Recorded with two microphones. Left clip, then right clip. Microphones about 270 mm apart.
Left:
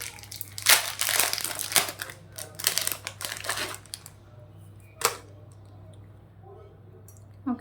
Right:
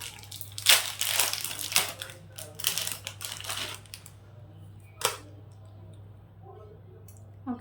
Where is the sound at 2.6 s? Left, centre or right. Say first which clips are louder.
Left 3 dB; centre.